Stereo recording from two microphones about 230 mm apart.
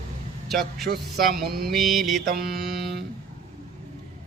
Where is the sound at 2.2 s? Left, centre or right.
Right.